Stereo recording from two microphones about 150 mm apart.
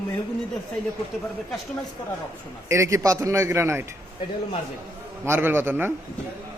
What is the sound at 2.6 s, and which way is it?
A man's voice, 20° right (ahead or behind).